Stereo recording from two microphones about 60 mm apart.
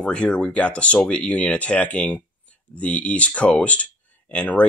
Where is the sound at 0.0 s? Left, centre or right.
Centre.